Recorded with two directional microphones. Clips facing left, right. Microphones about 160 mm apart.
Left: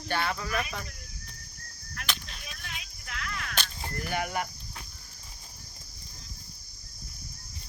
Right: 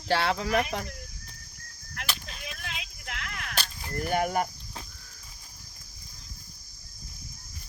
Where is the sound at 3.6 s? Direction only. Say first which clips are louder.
Right 4 dB; 40° right (ahead or behind).